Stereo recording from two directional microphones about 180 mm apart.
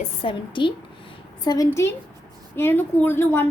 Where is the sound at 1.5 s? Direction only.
15° left (ahead or behind).